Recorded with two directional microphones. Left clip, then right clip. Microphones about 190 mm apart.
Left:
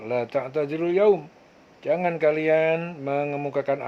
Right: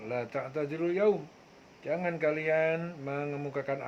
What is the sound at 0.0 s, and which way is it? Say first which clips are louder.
Speech: left 9 dB; 35° left (ahead or behind).